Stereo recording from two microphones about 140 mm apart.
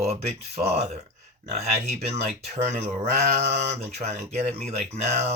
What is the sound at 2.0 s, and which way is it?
Speech, 55° right (ahead or behind).